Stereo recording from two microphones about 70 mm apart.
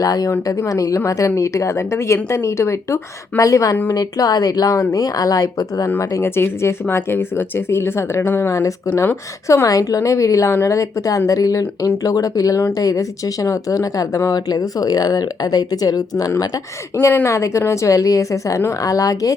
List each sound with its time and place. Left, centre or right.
0.0 s speech: left
0.3 s speech: left
3.9 s speech: left
8.4 s speech: left
16.9 s speech: left